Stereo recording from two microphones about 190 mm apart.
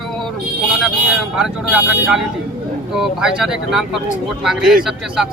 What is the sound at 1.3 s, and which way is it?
Speech, 5° right (ahead or behind).